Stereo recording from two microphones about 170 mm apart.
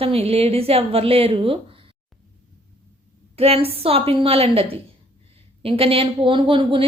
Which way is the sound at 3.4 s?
35° right (ahead or behind).